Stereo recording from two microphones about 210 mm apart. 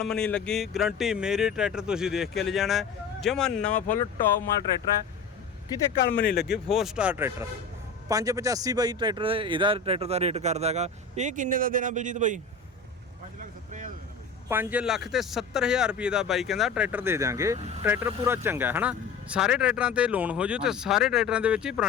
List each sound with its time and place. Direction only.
0.0 s speech: 5° left (ahead or behind)
6.1 s speech: 50° left (ahead or behind)
6.7 s a man's voice: centre (ahead or behind); by 12.4 s 35° right (ahead or behind)
13.4 s vehicle: 40° right (ahead or behind)
14.5 s speech: 10° right (ahead or behind)